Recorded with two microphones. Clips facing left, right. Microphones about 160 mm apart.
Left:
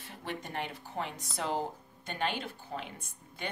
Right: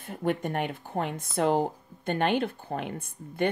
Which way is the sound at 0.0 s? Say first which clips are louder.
Right 12 dB; 50° right (ahead or behind).